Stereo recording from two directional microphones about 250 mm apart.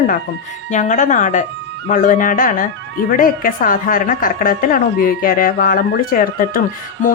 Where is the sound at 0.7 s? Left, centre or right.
Left.